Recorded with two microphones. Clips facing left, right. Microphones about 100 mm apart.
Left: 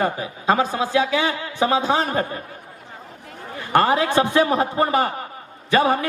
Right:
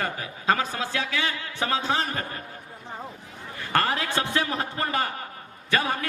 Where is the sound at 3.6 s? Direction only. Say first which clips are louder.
Left 8 dB; 15° left (ahead or behind).